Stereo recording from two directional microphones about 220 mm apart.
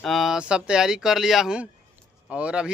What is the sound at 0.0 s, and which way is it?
A man's voice, centre (ahead or behind).